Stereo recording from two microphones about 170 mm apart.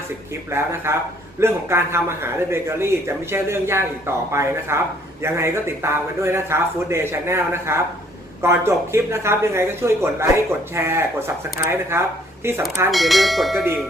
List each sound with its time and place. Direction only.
0.5 s speech: 15° right (ahead or behind)
12.9 s bell: centre (ahead or behind)